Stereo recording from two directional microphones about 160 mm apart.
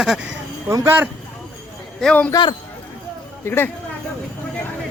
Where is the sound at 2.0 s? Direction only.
5° left (ahead or behind).